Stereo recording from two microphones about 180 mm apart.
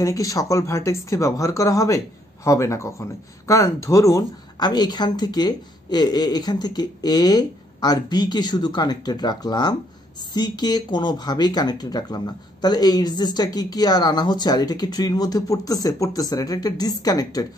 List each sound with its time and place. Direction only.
0.0 s speech: 20° left (ahead or behind)